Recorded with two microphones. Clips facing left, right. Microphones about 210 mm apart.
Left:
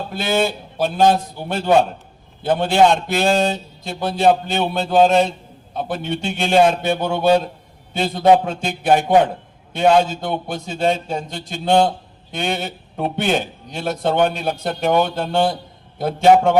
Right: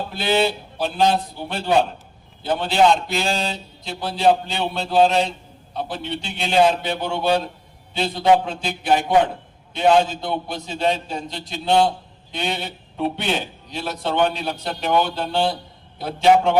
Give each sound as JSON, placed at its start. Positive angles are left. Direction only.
{"t": 0.1, "sound": "a man's voice", "side_deg": 45}